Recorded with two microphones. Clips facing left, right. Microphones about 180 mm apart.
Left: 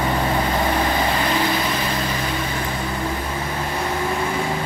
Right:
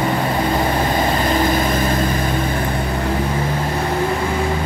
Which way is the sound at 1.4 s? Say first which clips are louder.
Right 5 dB; 45° right (ahead or behind).